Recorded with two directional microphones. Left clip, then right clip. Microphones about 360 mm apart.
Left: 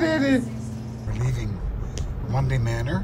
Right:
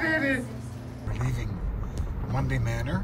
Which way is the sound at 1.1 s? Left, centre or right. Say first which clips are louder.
Left 3 dB; centre.